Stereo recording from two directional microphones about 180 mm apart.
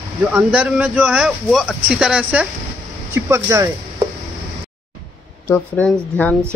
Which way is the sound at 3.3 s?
15° right (ahead or behind).